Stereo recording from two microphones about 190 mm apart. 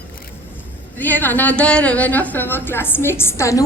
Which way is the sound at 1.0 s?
10° left (ahead or behind).